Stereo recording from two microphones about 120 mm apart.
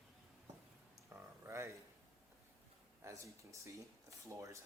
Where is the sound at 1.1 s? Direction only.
20° right (ahead or behind).